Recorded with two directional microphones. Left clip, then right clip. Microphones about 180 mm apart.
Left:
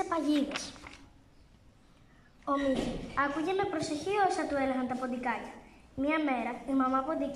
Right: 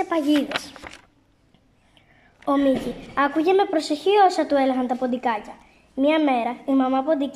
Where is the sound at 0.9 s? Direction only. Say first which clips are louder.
Right 9 dB; 50° right (ahead or behind).